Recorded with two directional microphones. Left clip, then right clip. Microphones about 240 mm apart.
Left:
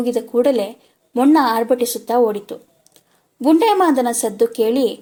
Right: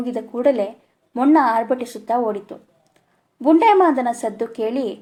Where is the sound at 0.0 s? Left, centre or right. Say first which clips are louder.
Left 3 dB; centre.